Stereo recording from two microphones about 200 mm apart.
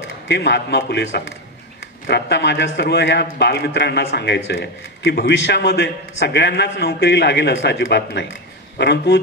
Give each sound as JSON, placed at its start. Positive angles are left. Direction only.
{"t": 0.3, "sound": "a man's voice", "side_deg": 60}